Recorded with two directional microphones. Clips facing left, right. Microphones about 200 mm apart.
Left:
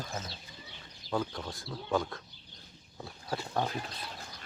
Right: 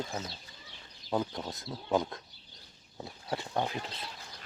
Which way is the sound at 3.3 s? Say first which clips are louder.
Even; 20° right (ahead or behind).